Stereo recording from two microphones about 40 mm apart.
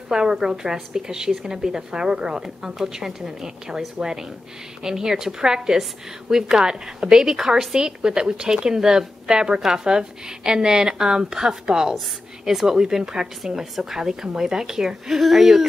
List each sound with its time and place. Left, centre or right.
0.1 s a woman's voice: centre